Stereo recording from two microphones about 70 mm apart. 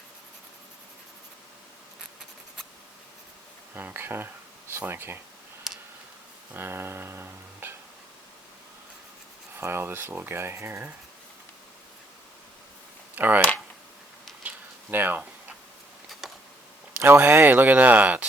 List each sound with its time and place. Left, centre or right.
3.8 s speech: right
5.7 s tick: centre
6.5 s music: right
9.6 s speech: right
13.1 s speech: right
14.4 s tick-tock: right
16.9 s speech: right